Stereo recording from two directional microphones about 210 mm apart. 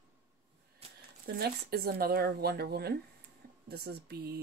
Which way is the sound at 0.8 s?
30° right (ahead or behind).